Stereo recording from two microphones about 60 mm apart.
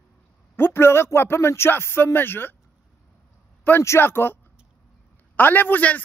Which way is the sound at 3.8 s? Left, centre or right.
Left.